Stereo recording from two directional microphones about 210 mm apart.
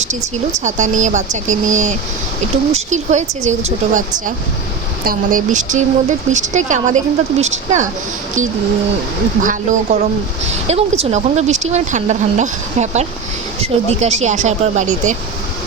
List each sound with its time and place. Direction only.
0.6 s speech: 35° right (ahead or behind)
5.0 s speech: 40° right (ahead or behind)
9.4 s speech: 35° right (ahead or behind)